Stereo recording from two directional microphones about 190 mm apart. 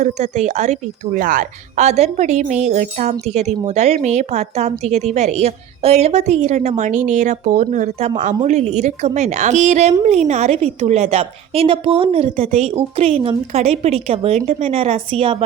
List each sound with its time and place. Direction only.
0.0 s a woman's voice: 35° right (ahead or behind)